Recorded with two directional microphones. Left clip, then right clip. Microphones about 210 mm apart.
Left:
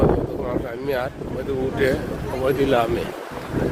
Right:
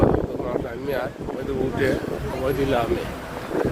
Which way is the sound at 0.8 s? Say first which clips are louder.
Left 2 dB; 25° left (ahead or behind).